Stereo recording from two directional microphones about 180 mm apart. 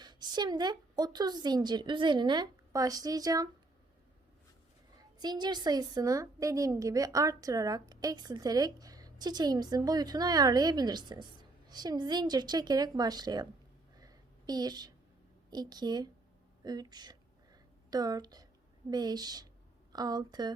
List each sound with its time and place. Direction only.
0.0 s a woman's voice: 25° right (ahead or behind)
4.9 s a woman's voice: 20° right (ahead or behind)
14.0 s a sound: 20° right (ahead or behind)
15.4 s a woman's voice: 20° right (ahead or behind)
16.6 s a sound: 20° right (ahead or behind)
18.9 s a woman's voice: 20° right (ahead or behind)